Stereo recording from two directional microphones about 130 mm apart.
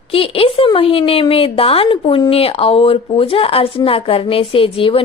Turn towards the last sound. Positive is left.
turn(degrees=45)  # may be behind; listen again after turning